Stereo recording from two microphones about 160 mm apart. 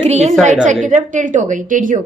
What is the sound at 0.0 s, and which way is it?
A woman's voice, 45° right (ahead or behind).